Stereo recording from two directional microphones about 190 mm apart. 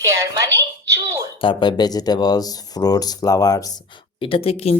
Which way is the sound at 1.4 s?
25° left (ahead or behind).